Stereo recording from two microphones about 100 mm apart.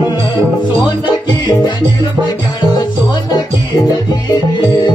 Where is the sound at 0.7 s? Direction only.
40° left (ahead or behind).